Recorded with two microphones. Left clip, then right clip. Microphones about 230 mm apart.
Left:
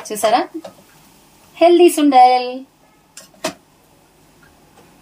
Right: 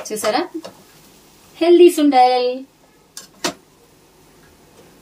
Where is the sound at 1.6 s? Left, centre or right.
Left.